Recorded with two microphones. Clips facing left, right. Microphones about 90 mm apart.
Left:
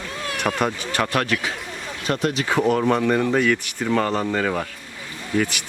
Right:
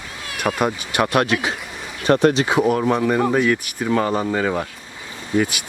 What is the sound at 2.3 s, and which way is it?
Speech, 15° right (ahead or behind).